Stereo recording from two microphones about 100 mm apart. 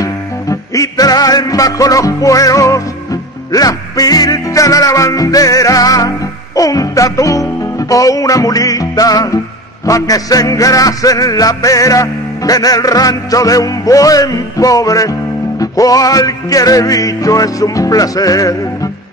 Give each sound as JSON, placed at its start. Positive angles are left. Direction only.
{"t": 0.0, "sound": "music", "side_deg": 35}